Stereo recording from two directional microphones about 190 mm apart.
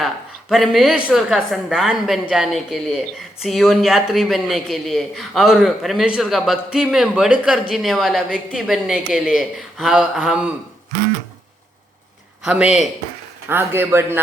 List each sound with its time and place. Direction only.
0.0 s a woman's voice: centre (ahead or behind)
12.5 s speech: 5° right (ahead or behind)